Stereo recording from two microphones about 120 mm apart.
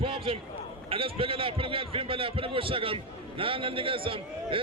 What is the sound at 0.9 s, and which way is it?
A man's voice, 50° right (ahead or behind).